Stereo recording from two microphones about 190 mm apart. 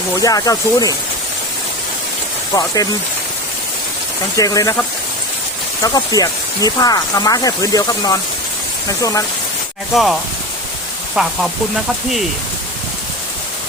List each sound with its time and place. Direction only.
0.2 s speech: 20° left (ahead or behind)
4.4 s speech: 20° left (ahead or behind)
5.8 s speech: 20° left (ahead or behind)
9.9 s speech: centre (ahead or behind)
11.2 s speech: centre (ahead or behind)